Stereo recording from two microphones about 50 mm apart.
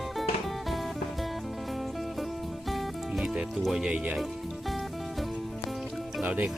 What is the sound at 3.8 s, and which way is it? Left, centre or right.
Music, right.